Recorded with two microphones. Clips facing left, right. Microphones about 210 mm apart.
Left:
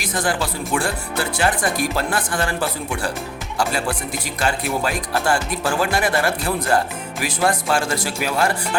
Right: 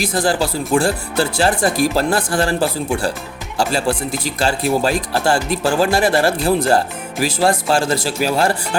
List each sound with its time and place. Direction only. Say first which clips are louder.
0.0 s speech: right 5 dB; 30° right (ahead or behind)